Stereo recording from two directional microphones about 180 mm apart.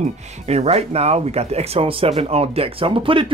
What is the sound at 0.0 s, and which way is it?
Speech, 40° right (ahead or behind).